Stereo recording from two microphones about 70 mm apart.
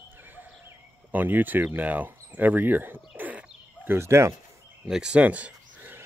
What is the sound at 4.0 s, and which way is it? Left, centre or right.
Speech, right.